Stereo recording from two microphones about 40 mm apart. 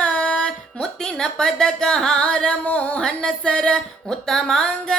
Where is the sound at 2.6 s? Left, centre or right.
Left.